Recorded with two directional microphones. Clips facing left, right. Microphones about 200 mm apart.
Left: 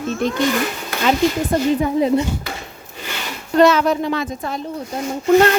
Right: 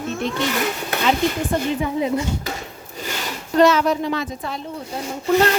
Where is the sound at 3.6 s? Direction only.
55° left (ahead or behind).